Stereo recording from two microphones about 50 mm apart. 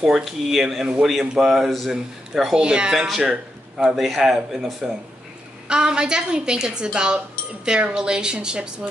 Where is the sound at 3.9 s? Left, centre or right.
Centre.